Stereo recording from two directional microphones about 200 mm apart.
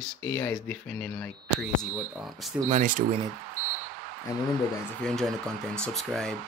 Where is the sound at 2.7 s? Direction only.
40° right (ahead or behind).